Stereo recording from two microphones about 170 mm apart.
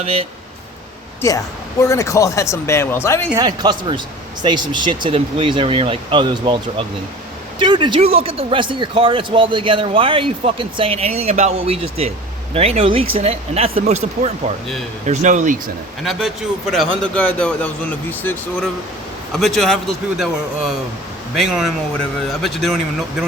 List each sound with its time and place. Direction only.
0.0 s speech: 35° right (ahead or behind)
1.2 s speech: 15° left (ahead or behind)
3.3 s speech: 25° right (ahead or behind); by 15.5 s 45° right (ahead or behind)
17.0 s a man's voice: 5° left (ahead or behind)